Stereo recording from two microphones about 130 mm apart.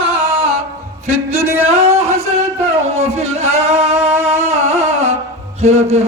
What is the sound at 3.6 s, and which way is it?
Music, 55° right (ahead or behind).